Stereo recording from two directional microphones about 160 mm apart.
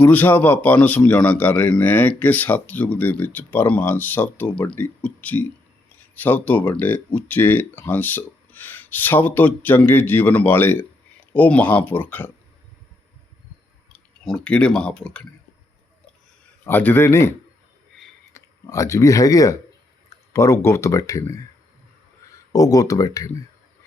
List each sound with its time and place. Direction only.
0.0 s a man's voice: 10° left (ahead or behind)
13.9 s speech: 5° left (ahead or behind)
16.6 s a man's voice: 15° left (ahead or behind)
18.3 s speech: 20° left (ahead or behind)
22.5 s speech: 20° left (ahead or behind)